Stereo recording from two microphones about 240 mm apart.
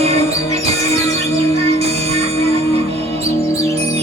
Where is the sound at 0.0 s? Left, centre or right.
Right.